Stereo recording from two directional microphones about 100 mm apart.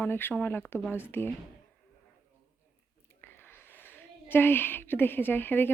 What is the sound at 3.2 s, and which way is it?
A woman's voice, 20° left (ahead or behind).